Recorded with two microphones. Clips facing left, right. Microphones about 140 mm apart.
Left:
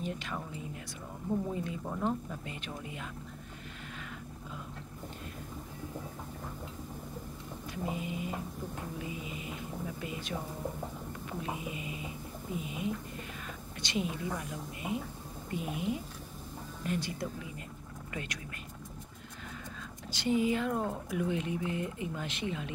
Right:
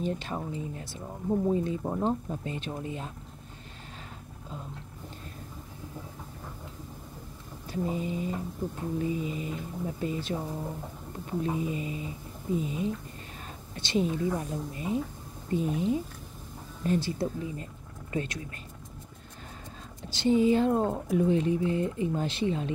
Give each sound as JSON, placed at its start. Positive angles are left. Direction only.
{"t": 0.0, "sound": "speech", "side_deg": -30}
{"t": 7.7, "sound": "speech", "side_deg": -35}
{"t": 8.6, "sound": "music", "side_deg": -45}
{"t": 8.9, "sound": "speech", "side_deg": -35}
{"t": 11.4, "sound": "speech", "side_deg": -35}
{"t": 20.1, "sound": "speech", "side_deg": -25}